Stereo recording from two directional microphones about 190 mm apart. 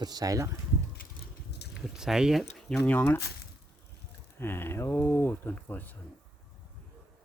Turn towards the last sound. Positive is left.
turn(degrees=10)  # may be behind; listen again after turning